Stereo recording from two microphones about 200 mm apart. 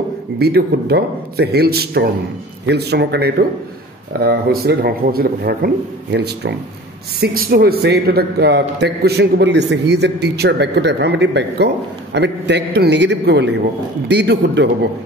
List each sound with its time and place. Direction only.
0.4 s a man's voice: 55° right (ahead or behind)